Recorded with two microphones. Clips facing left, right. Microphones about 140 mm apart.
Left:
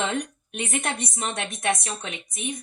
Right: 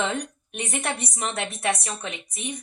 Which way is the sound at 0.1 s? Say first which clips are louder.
Left 1 dB; 35° right (ahead or behind).